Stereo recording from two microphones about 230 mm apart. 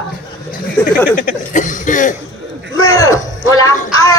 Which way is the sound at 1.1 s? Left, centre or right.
Left.